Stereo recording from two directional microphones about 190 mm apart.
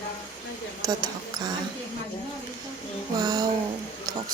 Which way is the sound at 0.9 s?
20° right (ahead or behind).